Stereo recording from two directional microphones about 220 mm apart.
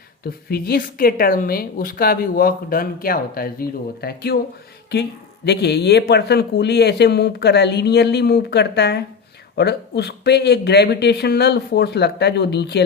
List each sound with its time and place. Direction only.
0.3 s a woman's voice: 45° left (ahead or behind)
5.5 s a woman's voice: 50° left (ahead or behind)